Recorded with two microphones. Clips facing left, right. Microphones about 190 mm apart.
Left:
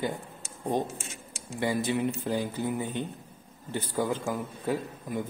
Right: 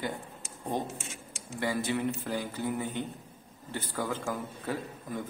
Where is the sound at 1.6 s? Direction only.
20° left (ahead or behind).